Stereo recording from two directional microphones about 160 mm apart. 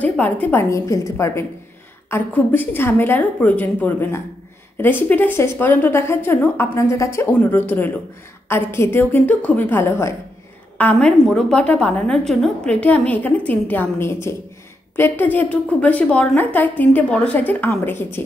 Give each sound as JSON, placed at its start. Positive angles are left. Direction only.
{"t": 0.0, "sound": "a woman's voice", "side_deg": 10}